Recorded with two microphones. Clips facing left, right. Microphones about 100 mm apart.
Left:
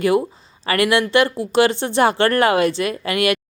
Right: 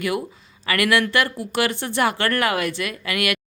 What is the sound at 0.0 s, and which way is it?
Speech, 30° left (ahead or behind).